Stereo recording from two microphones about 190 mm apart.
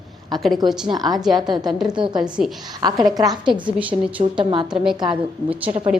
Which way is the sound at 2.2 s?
Centre (ahead or behind).